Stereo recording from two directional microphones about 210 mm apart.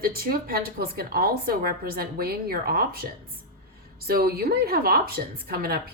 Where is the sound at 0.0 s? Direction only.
45° right (ahead or behind).